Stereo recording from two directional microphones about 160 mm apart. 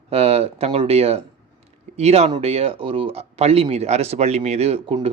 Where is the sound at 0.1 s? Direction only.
40° right (ahead or behind).